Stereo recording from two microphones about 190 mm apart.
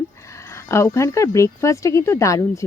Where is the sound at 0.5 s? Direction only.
15° left (ahead or behind).